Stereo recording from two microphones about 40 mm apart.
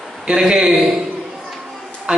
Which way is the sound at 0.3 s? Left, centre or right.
Centre.